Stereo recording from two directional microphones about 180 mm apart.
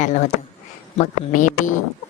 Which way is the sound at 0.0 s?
40° left (ahead or behind).